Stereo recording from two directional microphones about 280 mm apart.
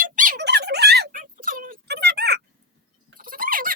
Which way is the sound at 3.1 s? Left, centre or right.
Right.